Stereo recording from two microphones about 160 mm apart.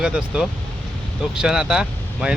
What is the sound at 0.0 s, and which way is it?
Speech, 5° right (ahead or behind).